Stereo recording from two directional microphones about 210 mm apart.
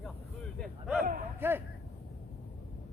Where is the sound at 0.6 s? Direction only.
Centre (ahead or behind).